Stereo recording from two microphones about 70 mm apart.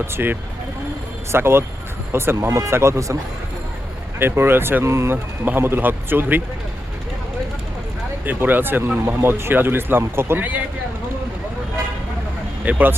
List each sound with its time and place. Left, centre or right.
0.1 s speech: right
4.2 s speech: right
8.2 s speech: right
12.6 s speech: right